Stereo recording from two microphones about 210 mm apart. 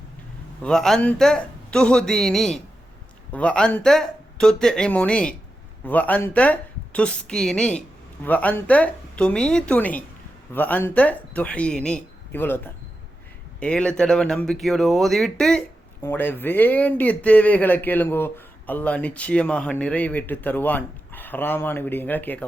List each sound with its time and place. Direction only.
0.6 s speech: centre (ahead or behind)